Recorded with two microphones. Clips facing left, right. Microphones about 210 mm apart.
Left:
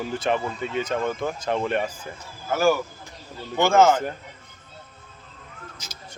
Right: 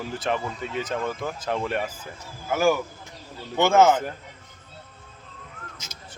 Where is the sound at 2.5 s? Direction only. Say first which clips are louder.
Left 1 dB; 15° right (ahead or behind).